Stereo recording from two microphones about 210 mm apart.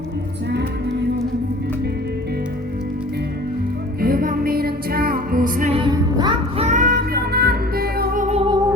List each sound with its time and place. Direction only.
4.0 s music: 45° right (ahead or behind)
5.7 s music: 20° right (ahead or behind)
6.7 s music: 35° right (ahead or behind)